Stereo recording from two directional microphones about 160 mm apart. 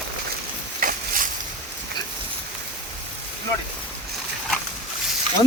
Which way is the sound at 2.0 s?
25° left (ahead or behind).